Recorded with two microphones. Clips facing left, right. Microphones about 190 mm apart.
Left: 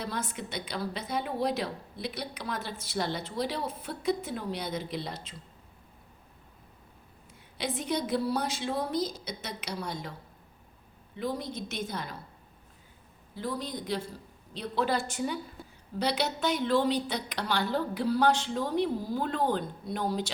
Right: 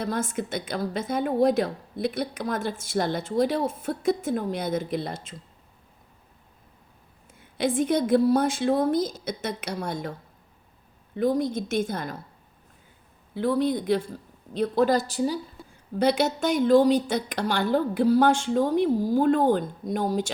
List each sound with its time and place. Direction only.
0.0 s a woman's voice: 45° right (ahead or behind)
7.6 s a woman's voice: 50° right (ahead or behind)
11.2 s a woman's voice: 50° right (ahead or behind)
13.3 s a woman's voice: 60° right (ahead or behind); by 15.4 s 35° right (ahead or behind)
16.0 s a woman's voice: 50° right (ahead or behind)